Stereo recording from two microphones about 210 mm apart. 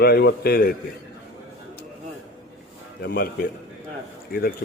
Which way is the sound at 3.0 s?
45° left (ahead or behind).